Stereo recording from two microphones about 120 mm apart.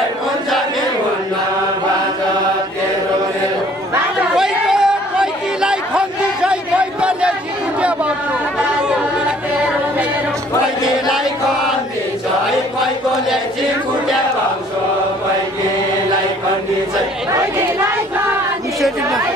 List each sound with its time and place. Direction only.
4.4 s chatter: 5° right (ahead or behind)
17.3 s chatter: 20° right (ahead or behind)